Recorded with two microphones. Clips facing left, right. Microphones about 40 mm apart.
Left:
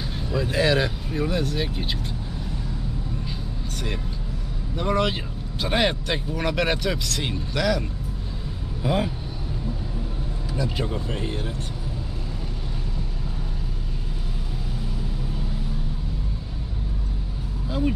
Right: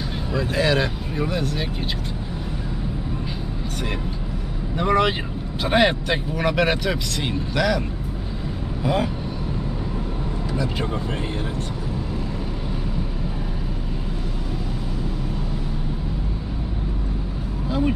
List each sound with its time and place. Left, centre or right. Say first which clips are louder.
0.4 s speech: right 1 dB; centre
4.7 s speech: right 4 dB; centre
17.6 s music: right 3 dB; centre